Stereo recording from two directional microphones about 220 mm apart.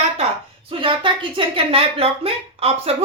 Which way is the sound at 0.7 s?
20° right (ahead or behind).